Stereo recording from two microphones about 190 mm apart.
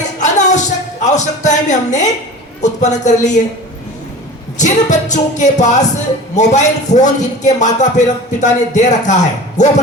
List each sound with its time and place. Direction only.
0.2 s music: 40° left (ahead or behind)
1.0 s a man's voice: 40° left (ahead or behind)
4.6 s a man's voice: 40° left (ahead or behind)